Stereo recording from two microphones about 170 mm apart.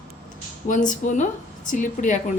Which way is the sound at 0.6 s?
50° left (ahead or behind).